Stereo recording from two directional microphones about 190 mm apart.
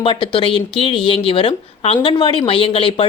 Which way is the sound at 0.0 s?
25° left (ahead or behind).